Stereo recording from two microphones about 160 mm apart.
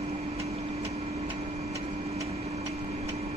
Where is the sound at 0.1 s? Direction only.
40° right (ahead or behind).